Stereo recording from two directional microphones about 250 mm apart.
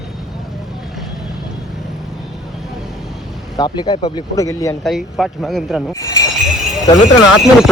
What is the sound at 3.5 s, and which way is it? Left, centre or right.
Speech, centre.